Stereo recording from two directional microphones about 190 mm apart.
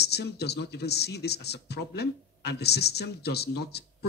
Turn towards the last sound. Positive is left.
turn(degrees=60)  # may be behind; listen again after turning